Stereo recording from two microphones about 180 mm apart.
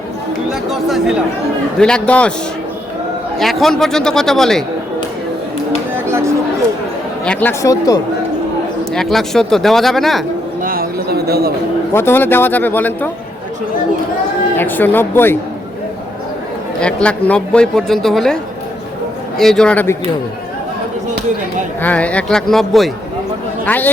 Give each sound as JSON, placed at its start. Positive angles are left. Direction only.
{"t": 0.7, "sound": "speech", "side_deg": 0}
{"t": 3.3, "sound": "speech", "side_deg": 0}
{"t": 7.3, "sound": "speech", "side_deg": 10}
{"t": 9.0, "sound": "speech", "side_deg": 0}
{"t": 10.6, "sound": "a sound", "side_deg": -55}
{"t": 11.9, "sound": "speech", "side_deg": 10}
{"t": 14.5, "sound": "speech", "side_deg": 10}
{"t": 16.8, "sound": "speech", "side_deg": 5}
{"t": 19.4, "sound": "speech", "side_deg": 5}
{"t": 21.8, "sound": "speech", "side_deg": 10}